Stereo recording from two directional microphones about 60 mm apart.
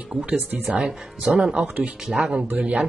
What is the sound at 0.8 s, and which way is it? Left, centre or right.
Speech, centre.